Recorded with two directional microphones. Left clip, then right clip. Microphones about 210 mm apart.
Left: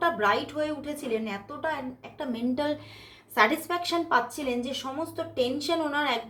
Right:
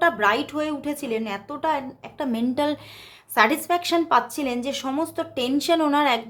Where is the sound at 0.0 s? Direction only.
40° right (ahead or behind).